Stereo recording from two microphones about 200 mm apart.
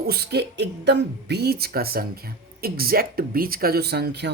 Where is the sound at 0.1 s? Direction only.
55° right (ahead or behind).